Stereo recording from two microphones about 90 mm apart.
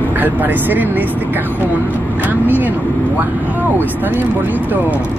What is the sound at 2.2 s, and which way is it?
Speech, 20° right (ahead or behind).